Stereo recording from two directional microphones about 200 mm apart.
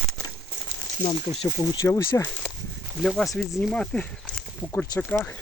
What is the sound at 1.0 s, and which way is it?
Speech, 20° left (ahead or behind).